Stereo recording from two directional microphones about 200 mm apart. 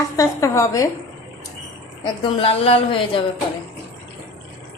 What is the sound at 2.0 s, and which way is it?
A woman's voice, 25° left (ahead or behind).